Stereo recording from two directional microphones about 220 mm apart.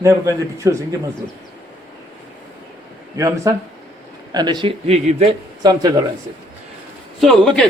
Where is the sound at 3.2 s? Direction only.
15° right (ahead or behind).